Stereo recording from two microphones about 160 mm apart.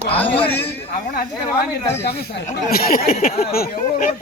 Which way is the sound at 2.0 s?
85° left.